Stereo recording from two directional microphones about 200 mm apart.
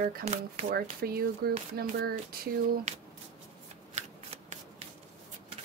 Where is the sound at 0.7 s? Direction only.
50° right (ahead or behind).